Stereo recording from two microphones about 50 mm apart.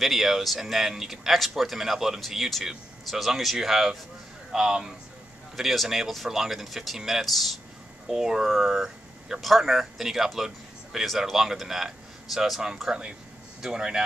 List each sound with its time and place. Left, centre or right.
0.0 s speech: centre
5.6 s speech: centre
8.1 s a man's voice: centre